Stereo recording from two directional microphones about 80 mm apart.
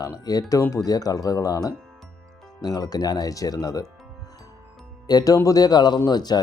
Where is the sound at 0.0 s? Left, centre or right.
Left.